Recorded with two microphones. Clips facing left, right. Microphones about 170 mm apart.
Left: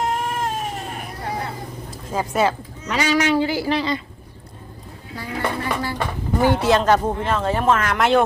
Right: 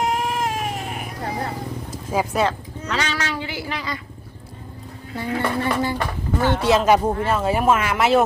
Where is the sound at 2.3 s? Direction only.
10° left (ahead or behind).